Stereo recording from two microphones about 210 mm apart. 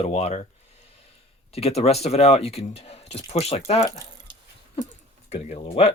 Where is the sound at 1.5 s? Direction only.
30° left (ahead or behind).